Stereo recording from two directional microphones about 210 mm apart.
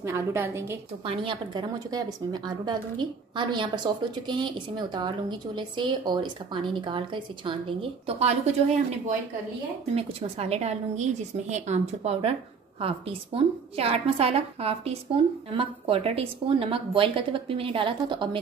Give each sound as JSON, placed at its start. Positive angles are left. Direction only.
{"t": 0.0, "sound": "a woman's voice", "side_deg": -10}
{"t": 1.0, "sound": "a woman's voice", "side_deg": -25}
{"t": 9.9, "sound": "a woman's voice", "side_deg": -30}